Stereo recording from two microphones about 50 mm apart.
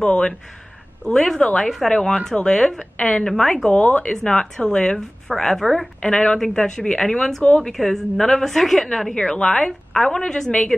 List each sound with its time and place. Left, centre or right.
0.0 s speech: left
1.0 s speech: centre
3.0 s a woman's voice: left
3.7 s speech: left
4.1 s speech: centre
5.9 s speech: centre
9.1 s speech: centre
10.7 s a woman's voice: centre